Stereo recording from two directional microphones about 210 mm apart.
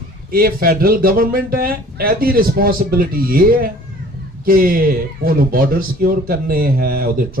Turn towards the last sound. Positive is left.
turn(degrees=-45)  # may be behind; listen again after turning